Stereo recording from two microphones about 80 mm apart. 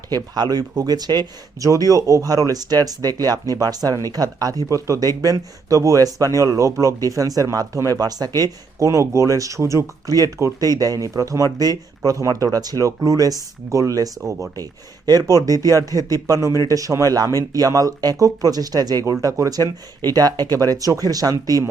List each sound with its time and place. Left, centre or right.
0.1 s speech: right
1.6 s speech: right